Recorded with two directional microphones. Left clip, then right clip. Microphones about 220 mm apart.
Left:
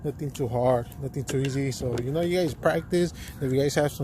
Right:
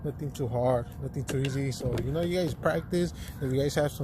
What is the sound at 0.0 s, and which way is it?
Speech, 35° left (ahead or behind).